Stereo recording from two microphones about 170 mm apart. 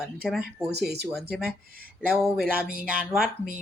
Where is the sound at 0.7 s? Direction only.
75° right (ahead or behind).